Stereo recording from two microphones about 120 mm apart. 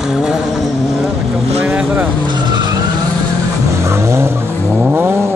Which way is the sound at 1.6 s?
15° right (ahead or behind).